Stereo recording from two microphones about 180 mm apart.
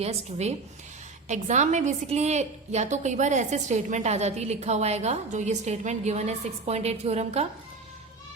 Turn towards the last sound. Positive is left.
turn(degrees=-35)  # may be behind; listen again after turning